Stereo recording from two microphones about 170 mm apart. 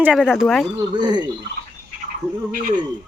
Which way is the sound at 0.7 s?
25° right (ahead or behind).